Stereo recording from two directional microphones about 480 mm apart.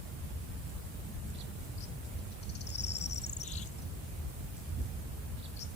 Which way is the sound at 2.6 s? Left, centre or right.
Left.